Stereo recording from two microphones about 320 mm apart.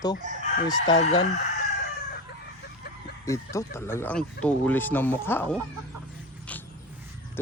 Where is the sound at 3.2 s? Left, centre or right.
Centre.